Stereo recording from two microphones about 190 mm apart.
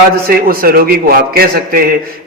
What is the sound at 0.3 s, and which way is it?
A man's voice, 50° right (ahead or behind).